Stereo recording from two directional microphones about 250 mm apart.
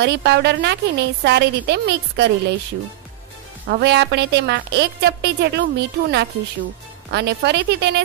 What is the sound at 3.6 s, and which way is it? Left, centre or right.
Speech, right.